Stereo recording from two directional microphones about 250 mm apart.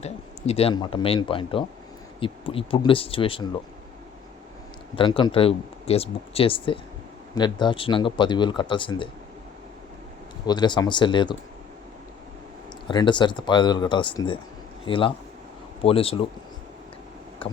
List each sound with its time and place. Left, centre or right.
0.0 s speech: left
4.9 s speech: centre
10.4 s speech: centre
12.9 s speech: centre
17.4 s vehicle: left